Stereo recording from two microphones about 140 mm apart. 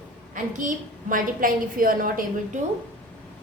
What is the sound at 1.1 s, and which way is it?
A woman's voice, 80° right.